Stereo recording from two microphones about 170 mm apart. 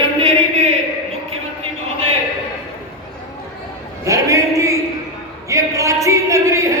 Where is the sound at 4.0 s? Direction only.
20° right (ahead or behind).